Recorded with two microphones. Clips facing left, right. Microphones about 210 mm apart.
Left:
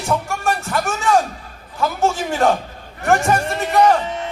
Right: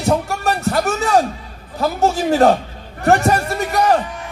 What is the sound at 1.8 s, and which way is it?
A man's voice, 35° right (ahead or behind).